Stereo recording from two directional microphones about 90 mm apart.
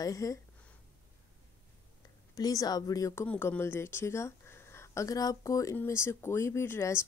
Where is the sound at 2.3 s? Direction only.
45° left (ahead or behind).